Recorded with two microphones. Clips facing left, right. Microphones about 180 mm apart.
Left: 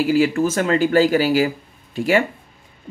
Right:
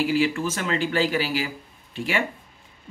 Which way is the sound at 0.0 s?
45° left (ahead or behind).